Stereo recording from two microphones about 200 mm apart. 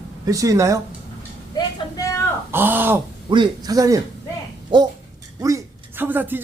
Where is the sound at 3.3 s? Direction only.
20° right (ahead or behind).